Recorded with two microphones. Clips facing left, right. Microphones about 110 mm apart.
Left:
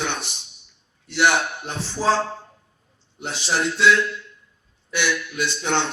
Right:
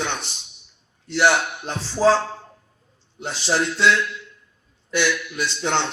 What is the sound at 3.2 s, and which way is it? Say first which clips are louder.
Speech: even; 15° left (ahead or behind).